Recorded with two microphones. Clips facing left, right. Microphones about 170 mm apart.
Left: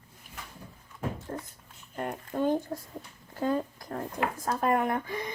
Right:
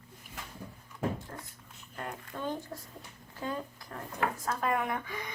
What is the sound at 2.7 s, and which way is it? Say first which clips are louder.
Speech: left 7 dB; 40° left (ahead or behind).